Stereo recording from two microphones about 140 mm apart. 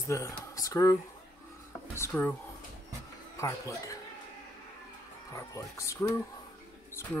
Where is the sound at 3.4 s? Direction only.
20° left (ahead or behind).